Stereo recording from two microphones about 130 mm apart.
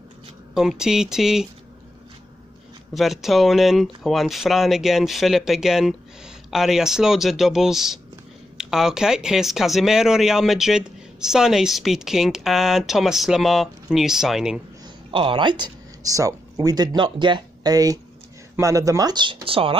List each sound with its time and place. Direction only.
0.6 s speech: 5° right (ahead or behind)
2.9 s speech: centre (ahead or behind)
15.0 s speech: 40° right (ahead or behind)